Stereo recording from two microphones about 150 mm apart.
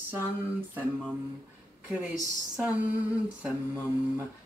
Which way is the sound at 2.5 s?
10° right (ahead or behind).